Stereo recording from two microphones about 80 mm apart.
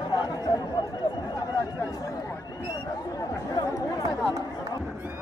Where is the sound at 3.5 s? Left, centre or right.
Left.